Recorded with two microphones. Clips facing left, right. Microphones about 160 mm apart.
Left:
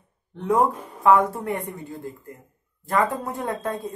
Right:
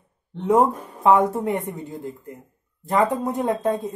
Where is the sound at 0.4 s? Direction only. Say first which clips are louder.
Right 3 dB; 20° right (ahead or behind).